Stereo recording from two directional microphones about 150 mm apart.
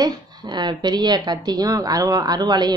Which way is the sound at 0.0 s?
30° right (ahead or behind).